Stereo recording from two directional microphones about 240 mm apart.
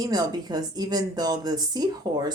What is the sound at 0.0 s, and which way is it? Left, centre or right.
Speech, centre.